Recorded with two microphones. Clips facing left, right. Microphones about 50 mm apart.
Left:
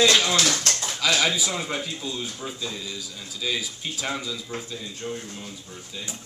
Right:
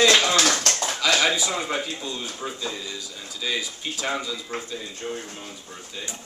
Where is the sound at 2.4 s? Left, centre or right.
Right.